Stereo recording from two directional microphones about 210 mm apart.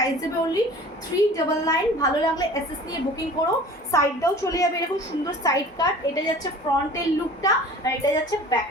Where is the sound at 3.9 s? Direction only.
15° left (ahead or behind).